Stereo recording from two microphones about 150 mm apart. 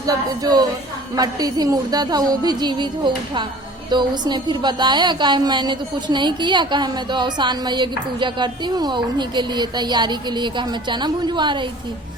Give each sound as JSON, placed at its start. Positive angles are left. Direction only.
{"t": 0.0, "sound": "a woman's voice", "side_deg": -25}